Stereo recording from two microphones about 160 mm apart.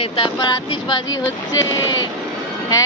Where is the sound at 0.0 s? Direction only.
35° left (ahead or behind).